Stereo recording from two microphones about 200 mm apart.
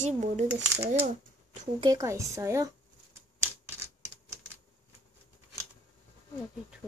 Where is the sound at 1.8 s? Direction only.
20° right (ahead or behind).